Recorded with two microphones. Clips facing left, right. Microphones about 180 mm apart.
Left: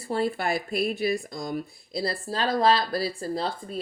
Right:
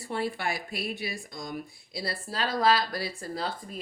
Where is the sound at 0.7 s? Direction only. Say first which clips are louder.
Left 9 dB; 55° left (ahead or behind).